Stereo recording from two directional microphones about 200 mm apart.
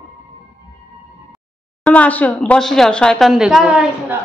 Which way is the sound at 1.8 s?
5° left (ahead or behind).